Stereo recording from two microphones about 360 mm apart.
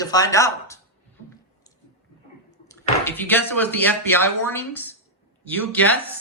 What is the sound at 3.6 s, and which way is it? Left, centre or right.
Speech, centre.